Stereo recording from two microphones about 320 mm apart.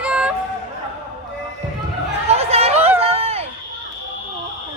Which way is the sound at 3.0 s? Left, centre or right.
Centre.